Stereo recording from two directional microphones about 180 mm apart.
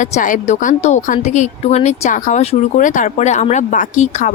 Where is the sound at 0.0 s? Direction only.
45° left (ahead or behind).